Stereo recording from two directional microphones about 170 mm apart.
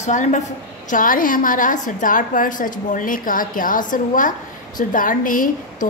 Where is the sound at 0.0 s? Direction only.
45° left (ahead or behind).